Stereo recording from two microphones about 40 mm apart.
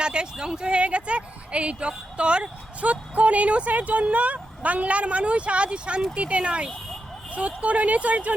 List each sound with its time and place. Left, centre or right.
0.0 s speech: right